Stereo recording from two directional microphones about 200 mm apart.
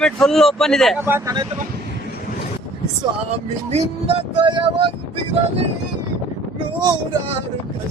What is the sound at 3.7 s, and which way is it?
Music, 30° right (ahead or behind).